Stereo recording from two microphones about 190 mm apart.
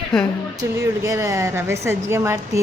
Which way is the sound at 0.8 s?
15° right (ahead or behind).